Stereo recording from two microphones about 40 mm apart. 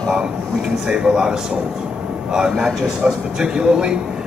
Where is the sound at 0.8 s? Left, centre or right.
Right.